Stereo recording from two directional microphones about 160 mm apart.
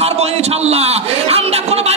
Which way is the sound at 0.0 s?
40° right (ahead or behind).